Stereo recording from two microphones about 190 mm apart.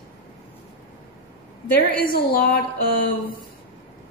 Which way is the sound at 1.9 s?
50° left (ahead or behind).